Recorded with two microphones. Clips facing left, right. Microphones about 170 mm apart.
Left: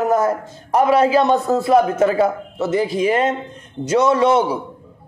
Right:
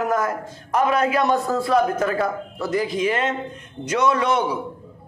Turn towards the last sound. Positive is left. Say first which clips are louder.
# left 6 dB
turn(degrees=30)  # may be behind; listen again after turning